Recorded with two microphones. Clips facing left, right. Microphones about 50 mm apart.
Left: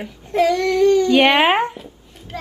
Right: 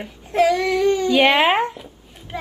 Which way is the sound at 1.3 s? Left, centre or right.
Centre.